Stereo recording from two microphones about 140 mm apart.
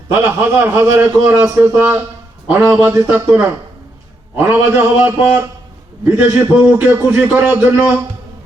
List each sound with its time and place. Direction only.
0.1 s a man's voice: 15° right (ahead or behind)